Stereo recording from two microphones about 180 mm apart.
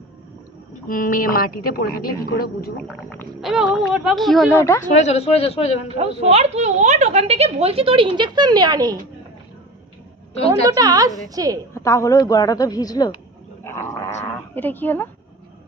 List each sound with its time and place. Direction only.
0.9 s a woman's voice: 50° left (ahead or behind)
2.8 s speech: centre (ahead or behind)
4.5 s a woman's voice: 15° left (ahead or behind)
4.9 s speech: 35° left (ahead or behind)
6.0 s a woman's voice: 35° right (ahead or behind)
10.7 s a woman's voice: 20° right (ahead or behind)
11.7 s a woman's voice: 15° left (ahead or behind)
13.7 s a sound: 15° left (ahead or behind)
14.5 s a woman's voice: 10° left (ahead or behind)